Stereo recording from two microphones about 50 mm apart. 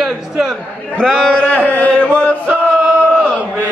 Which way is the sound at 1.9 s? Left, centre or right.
Left.